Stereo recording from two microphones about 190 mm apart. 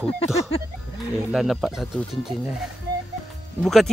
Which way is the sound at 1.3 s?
Centre (ahead or behind).